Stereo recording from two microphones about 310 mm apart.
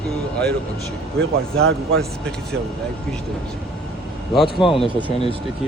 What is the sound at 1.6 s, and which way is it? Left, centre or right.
Speech, right.